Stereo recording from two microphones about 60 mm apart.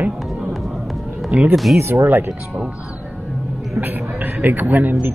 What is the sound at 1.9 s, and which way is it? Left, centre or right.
Speech, right.